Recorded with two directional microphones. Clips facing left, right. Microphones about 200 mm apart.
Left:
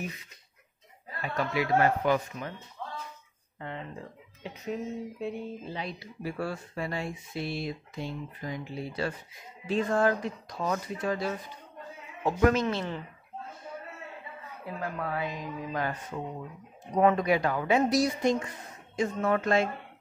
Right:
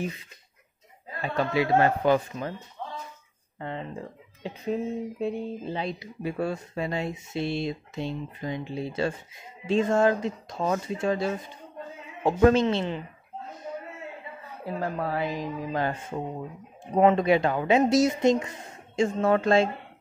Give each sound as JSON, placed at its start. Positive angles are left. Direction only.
{"t": 1.2, "sound": "speech", "side_deg": -25}
{"t": 3.5, "sound": "speech", "side_deg": -30}
{"t": 14.6, "sound": "speech", "side_deg": -35}